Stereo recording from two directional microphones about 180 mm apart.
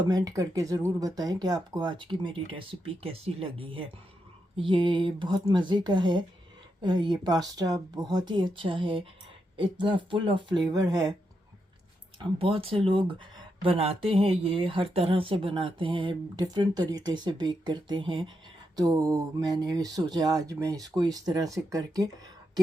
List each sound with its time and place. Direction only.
0.0 s speech: 20° right (ahead or behind)
12.2 s speech: 30° right (ahead or behind)